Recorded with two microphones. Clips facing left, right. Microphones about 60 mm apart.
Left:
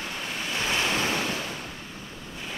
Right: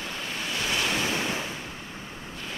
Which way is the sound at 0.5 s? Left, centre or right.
Left.